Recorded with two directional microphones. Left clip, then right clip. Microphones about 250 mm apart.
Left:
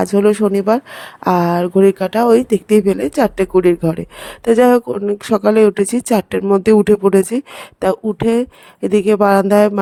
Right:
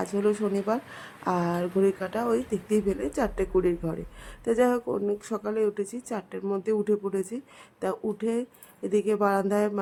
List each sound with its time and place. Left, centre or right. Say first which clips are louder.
0.0 s speech: left 13 dB; left